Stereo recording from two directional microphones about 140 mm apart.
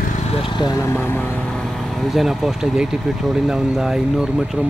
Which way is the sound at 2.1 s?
Centre (ahead or behind).